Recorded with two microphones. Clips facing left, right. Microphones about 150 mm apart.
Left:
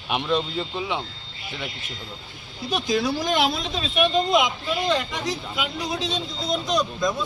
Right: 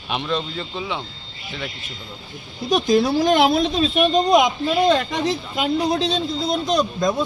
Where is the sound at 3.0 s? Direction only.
55° right (ahead or behind).